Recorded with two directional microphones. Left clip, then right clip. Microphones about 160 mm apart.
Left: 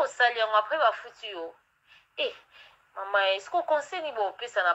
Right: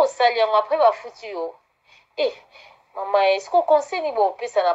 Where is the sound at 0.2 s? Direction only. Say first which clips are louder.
Right 6 dB; 25° right (ahead or behind).